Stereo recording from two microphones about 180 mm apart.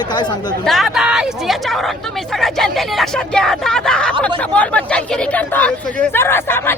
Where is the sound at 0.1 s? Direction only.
25° left (ahead or behind).